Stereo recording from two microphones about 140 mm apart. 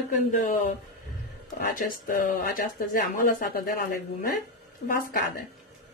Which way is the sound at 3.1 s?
90° left.